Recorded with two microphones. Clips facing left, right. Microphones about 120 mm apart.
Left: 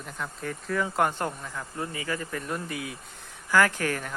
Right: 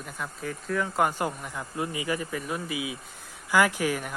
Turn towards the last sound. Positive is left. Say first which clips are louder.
# right 1 dB
turn(degrees=-10)  # may be behind; listen again after turning